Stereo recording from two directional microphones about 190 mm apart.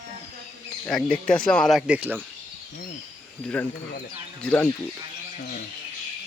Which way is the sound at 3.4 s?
10° left (ahead or behind).